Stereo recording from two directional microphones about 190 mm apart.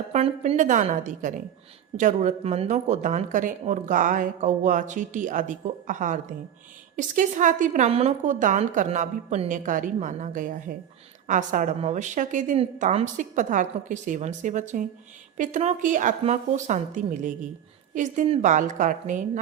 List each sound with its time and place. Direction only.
0.1 s a woman's voice: 35° right (ahead or behind)